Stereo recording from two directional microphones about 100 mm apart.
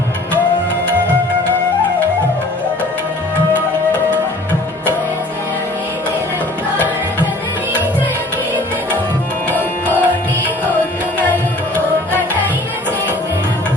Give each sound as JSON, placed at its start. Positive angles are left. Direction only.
{"t": 9.8, "sound": "tabla", "side_deg": 20}